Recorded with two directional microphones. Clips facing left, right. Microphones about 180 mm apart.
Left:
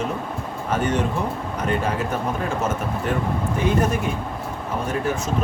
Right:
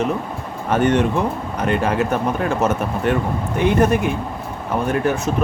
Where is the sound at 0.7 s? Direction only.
70° right (ahead or behind).